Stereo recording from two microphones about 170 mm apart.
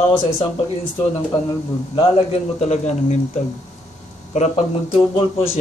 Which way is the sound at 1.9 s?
40° left (ahead or behind).